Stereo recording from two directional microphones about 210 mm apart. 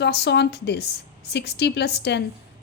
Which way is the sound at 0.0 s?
55° left (ahead or behind).